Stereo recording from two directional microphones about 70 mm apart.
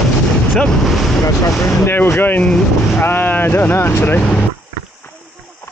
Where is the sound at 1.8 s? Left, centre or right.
Left.